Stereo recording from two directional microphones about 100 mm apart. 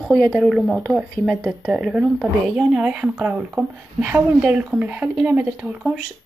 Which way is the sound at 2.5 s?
10° right (ahead or behind).